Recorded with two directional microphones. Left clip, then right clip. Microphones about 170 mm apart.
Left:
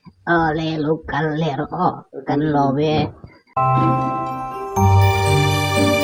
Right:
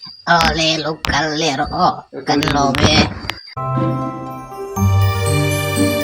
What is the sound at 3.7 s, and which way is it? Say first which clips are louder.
Music: left 3 dB; centre (ahead or behind).